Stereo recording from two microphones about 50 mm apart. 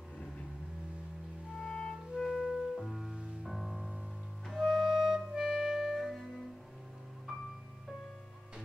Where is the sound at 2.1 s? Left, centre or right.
Centre.